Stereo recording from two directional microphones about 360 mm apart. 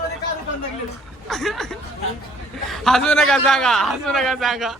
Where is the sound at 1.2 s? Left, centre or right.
Centre.